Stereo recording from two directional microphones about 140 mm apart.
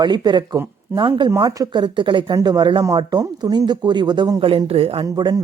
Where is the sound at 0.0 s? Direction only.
30° right (ahead or behind).